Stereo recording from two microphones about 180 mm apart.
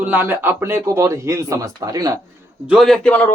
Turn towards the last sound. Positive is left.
turn(degrees=5)  # may be behind; listen again after turning